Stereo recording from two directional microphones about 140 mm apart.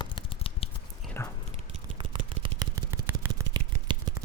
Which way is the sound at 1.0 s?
Centre (ahead or behind).